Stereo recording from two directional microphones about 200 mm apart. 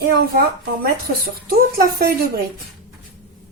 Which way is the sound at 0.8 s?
50° right (ahead or behind).